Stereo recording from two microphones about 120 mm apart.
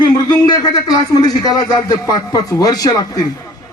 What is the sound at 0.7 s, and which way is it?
A man's voice, 35° left (ahead or behind).